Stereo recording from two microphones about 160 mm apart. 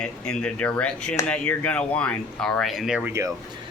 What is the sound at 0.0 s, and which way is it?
Speech, 5° left (ahead or behind).